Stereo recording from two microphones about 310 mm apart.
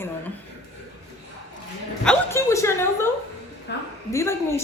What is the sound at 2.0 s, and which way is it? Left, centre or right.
A woman's voice, centre.